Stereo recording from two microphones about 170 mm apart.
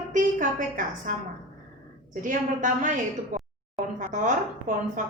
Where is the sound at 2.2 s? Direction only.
50° right (ahead or behind).